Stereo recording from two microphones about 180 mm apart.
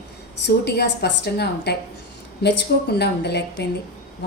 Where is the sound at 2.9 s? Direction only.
65° left (ahead or behind).